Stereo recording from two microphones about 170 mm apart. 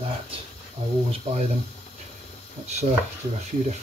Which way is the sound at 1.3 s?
40° right (ahead or behind).